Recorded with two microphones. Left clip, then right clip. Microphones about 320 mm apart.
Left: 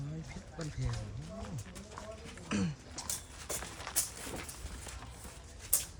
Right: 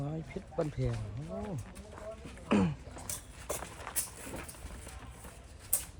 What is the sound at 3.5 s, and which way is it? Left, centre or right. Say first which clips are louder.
Vehicle: right 1 dB; centre.